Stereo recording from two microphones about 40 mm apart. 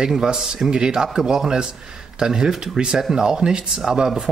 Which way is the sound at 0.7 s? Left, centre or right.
Right.